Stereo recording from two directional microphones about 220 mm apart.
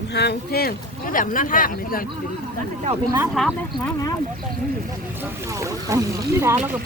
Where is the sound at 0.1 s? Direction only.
50° left (ahead or behind).